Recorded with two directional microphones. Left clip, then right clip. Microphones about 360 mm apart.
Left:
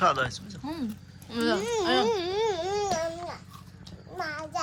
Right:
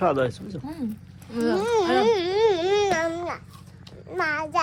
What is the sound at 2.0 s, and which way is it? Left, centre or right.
Speech, right.